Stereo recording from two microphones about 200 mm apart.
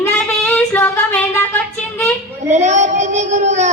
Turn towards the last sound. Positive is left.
turn(degrees=-35)  # may be behind; listen again after turning